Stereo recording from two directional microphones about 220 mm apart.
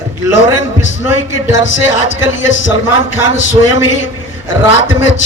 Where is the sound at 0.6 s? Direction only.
60° left (ahead or behind).